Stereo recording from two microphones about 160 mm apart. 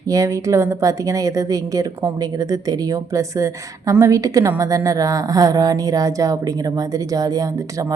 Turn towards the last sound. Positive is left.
turn(degrees=-20)  # may be behind; listen again after turning